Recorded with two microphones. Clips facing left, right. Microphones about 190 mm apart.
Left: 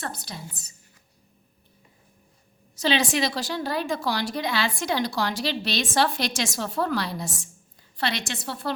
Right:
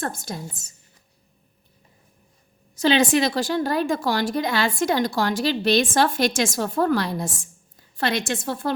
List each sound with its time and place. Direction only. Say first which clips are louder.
0.0 s a woman's voice: right 6 dB; 50° right (ahead or behind)
2.7 s a woman's voice: right 5 dB; 50° right (ahead or behind)